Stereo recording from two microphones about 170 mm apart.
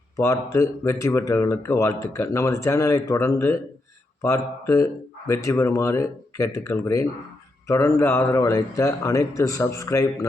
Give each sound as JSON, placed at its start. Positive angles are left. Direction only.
{"t": 0.2, "sound": "speech", "side_deg": 15}